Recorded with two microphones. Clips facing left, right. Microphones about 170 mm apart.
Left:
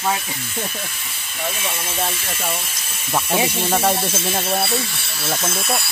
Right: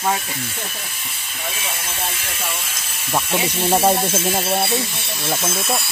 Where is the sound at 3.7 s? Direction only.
20° right (ahead or behind); by 5.8 s centre (ahead or behind).